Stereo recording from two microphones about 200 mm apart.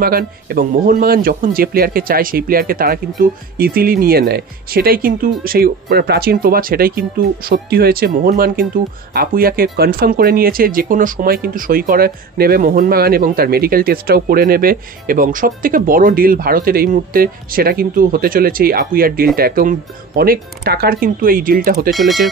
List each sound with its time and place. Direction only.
0.0 s speech: 50° right (ahead or behind)
21.9 s speech: centre (ahead or behind)